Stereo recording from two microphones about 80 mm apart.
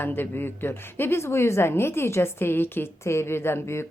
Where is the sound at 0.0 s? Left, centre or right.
Left.